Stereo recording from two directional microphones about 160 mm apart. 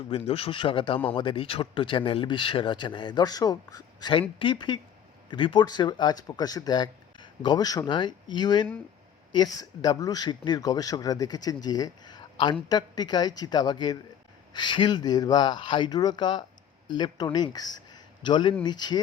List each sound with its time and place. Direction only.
0.1 s speech: 35° left (ahead or behind)